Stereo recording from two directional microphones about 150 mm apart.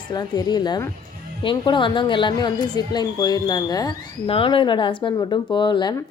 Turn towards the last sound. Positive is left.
turn(degrees=30)  # may be behind; listen again after turning